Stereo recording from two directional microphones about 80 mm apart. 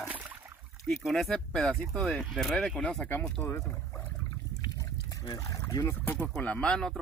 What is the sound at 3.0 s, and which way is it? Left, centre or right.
Speech, centre.